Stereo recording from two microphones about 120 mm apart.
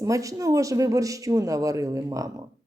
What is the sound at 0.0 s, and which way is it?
A woman's voice, 30° right (ahead or behind).